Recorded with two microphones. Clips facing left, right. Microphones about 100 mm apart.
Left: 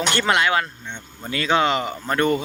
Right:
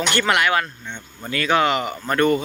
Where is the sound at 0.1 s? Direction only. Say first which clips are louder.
Even; 25° left (ahead or behind).